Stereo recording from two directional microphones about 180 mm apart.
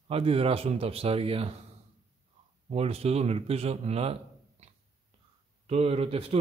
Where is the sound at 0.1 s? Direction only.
30° right (ahead or behind).